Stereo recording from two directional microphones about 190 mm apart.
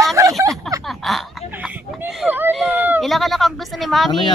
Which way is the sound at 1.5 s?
10° right (ahead or behind).